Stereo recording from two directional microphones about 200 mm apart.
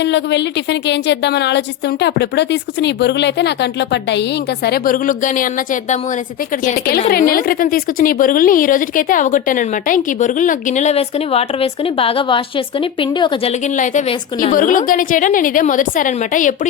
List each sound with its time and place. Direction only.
0.0 s a woman's voice: 60° left (ahead or behind); by 6.0 s 40° left (ahead or behind)
7.1 s speech: 45° left (ahead or behind); by 13.5 s 25° left (ahead or behind)
13.7 s speech: 40° left (ahead or behind)